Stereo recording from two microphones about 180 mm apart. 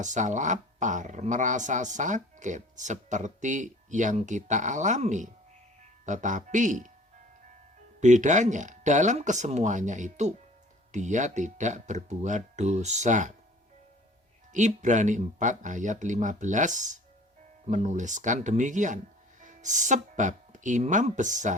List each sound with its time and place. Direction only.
0.0 s speech: 45° right (ahead or behind)
8.0 s speech: 45° right (ahead or behind)
14.5 s speech: 40° right (ahead or behind)